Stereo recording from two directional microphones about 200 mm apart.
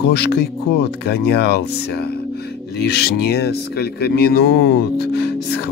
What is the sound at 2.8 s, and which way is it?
Speech, 55° left (ahead or behind).